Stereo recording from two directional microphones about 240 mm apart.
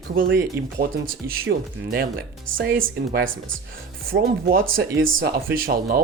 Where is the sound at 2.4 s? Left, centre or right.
Right.